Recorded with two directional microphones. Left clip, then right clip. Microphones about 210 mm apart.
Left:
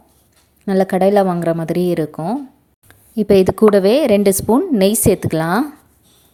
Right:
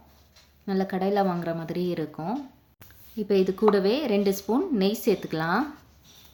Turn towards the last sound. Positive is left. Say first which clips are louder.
# left 9 dB
turn(degrees=50)  # may be behind; listen again after turning